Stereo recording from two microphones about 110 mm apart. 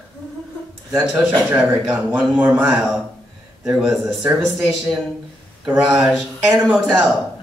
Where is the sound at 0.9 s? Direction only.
15° right (ahead or behind).